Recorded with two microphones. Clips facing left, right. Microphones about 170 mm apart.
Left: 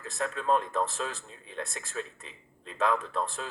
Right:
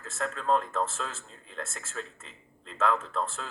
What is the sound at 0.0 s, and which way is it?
Speech, 15° left (ahead or behind).